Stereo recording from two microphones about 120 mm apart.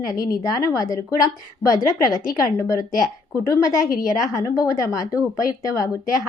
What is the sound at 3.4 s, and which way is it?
A woman's voice, 30° left (ahead or behind).